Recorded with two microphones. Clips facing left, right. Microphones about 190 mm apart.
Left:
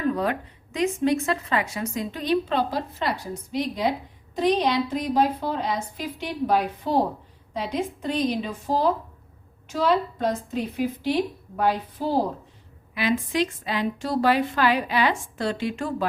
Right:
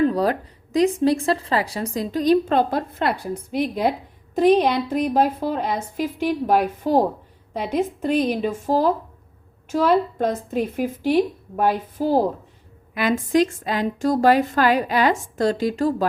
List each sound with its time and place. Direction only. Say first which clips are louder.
0.0 s a woman's voice: right 5 dB; 35° right (ahead or behind)
8.4 s a woman's voice: right 5 dB; 45° right (ahead or behind)